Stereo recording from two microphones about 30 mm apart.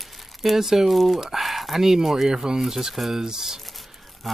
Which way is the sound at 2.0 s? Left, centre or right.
Centre.